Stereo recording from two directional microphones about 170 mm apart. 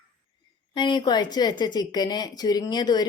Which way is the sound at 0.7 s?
25° left (ahead or behind).